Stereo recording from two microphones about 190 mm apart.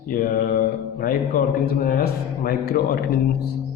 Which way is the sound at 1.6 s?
50° left (ahead or behind).